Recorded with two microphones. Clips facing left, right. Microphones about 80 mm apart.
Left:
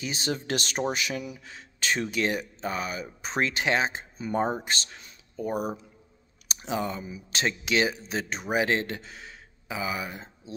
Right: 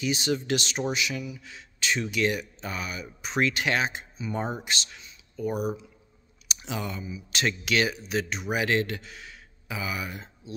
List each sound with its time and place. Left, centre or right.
0.0 s speech: left
4.2 s speech: left
7.4 s speech: left